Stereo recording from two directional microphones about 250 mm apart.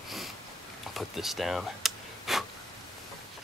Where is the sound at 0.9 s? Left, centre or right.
Centre.